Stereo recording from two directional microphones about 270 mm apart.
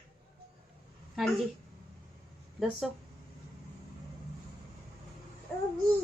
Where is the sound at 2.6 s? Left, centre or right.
Centre.